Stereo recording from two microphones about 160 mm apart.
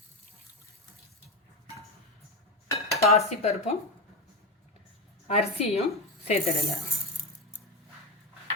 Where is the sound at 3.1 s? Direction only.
40° left (ahead or behind).